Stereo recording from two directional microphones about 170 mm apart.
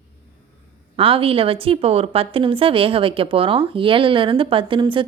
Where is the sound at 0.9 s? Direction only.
30° right (ahead or behind).